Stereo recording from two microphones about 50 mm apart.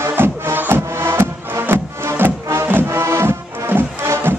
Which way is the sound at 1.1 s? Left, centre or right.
Right.